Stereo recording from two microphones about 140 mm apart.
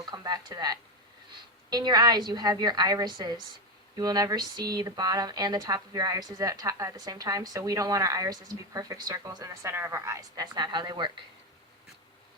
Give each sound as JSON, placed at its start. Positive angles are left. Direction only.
{"t": 0.0, "sound": "speech", "side_deg": -30}